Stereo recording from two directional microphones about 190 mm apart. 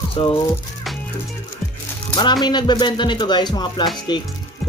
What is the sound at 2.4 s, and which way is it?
Speech, 25° left (ahead or behind).